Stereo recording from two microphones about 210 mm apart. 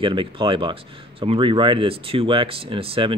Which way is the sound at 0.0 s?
25° right (ahead or behind).